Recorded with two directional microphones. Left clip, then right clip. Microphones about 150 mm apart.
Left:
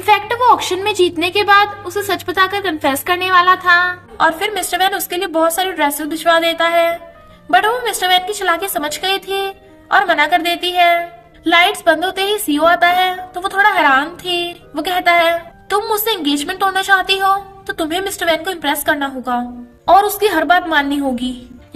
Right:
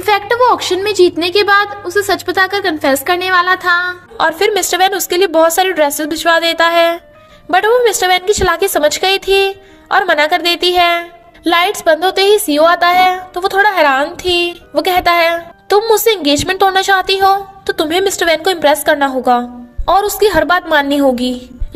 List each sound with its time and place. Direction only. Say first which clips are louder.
0.0 s a woman's voice: right 2 dB; 30° right (ahead or behind)